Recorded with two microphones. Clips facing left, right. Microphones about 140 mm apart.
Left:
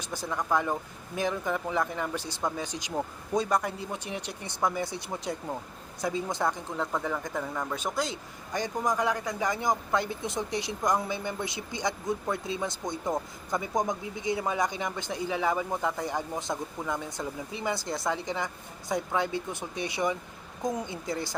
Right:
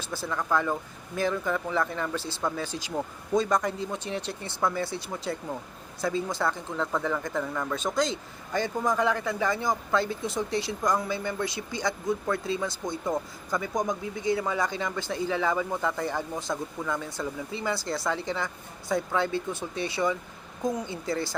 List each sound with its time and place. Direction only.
0.0 s speech: 15° left (ahead or behind)